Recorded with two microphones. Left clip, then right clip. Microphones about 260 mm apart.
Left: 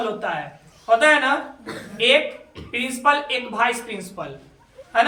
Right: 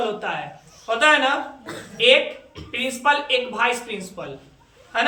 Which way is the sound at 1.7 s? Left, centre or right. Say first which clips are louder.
Left 1 dB; right.